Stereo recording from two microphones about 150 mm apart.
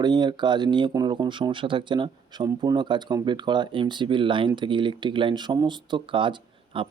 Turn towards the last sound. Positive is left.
turn(degrees=-35)  # may be behind; listen again after turning